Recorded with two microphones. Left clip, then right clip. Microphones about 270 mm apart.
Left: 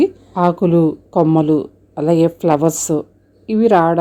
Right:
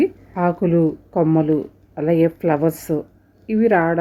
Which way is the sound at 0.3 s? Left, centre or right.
Left.